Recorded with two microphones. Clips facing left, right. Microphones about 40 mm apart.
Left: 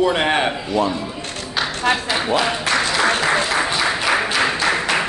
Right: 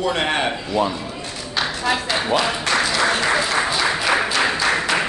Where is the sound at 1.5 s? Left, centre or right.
Centre.